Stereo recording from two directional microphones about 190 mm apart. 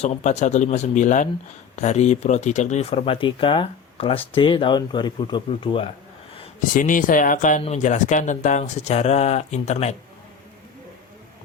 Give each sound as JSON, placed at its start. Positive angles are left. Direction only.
{"t": 0.0, "sound": "speech", "side_deg": 35}
{"t": 6.6, "sound": "speech", "side_deg": 45}